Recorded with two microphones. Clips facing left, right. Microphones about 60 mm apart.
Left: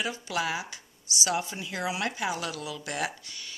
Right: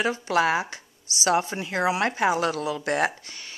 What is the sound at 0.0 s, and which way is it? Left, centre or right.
Speech, right.